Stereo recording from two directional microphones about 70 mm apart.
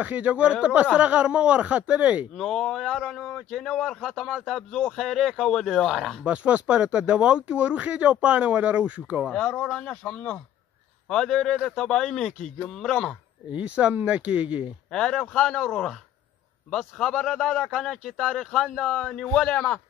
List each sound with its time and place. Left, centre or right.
0.0 s speech: right
2.3 s speech: centre
6.2 s speech: centre
9.3 s speech: centre
13.5 s speech: centre
14.9 s speech: centre
18.3 s speech: centre